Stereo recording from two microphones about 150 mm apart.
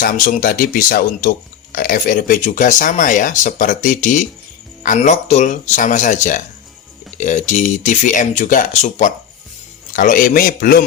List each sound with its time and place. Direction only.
0.0 s speech: 65° left (ahead or behind)
9.9 s speech: 65° left (ahead or behind)